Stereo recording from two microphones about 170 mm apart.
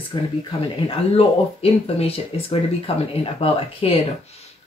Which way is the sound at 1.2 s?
35° left (ahead or behind).